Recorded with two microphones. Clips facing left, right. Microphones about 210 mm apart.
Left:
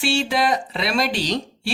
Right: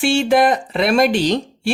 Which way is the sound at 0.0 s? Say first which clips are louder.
Right 7 dB; 50° right (ahead or behind).